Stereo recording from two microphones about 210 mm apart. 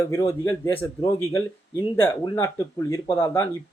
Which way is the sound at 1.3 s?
15° left (ahead or behind).